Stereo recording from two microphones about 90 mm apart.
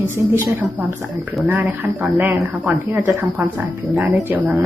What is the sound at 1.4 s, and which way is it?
Speech, 15° right (ahead or behind).